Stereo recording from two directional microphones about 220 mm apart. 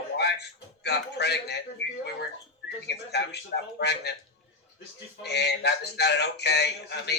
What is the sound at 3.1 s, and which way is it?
Speech, 50° left (ahead or behind).